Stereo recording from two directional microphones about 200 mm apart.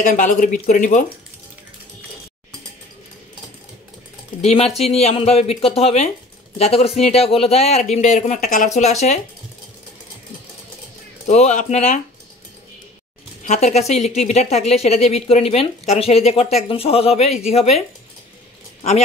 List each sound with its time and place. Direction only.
0.0 s speech: 40° left (ahead or behind)
4.4 s speech: 30° left (ahead or behind)
11.2 s speech: 35° left (ahead or behind)
13.4 s speech: 35° left (ahead or behind)